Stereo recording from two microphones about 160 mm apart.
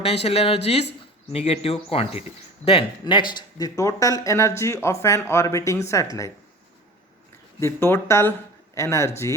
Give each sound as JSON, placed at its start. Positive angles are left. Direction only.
{"t": 0.0, "sound": "speech", "side_deg": 40}
{"t": 7.6, "sound": "speech", "side_deg": 15}